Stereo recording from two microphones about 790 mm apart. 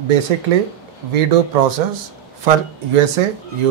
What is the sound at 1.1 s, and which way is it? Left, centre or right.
Speech, right.